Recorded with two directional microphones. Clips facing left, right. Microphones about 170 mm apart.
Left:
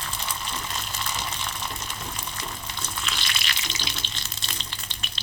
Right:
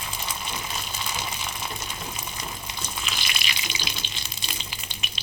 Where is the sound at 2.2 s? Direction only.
10° right (ahead or behind).